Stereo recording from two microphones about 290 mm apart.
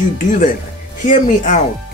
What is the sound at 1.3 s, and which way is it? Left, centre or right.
Speech, left.